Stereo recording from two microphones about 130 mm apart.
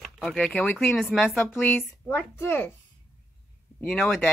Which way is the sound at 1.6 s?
15° left (ahead or behind).